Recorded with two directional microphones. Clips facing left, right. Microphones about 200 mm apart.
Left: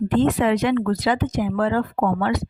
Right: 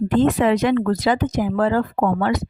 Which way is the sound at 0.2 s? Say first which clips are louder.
Right 2 dB; 40° right (ahead or behind).